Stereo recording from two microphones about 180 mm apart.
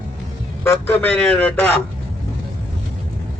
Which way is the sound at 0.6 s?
10° left (ahead or behind).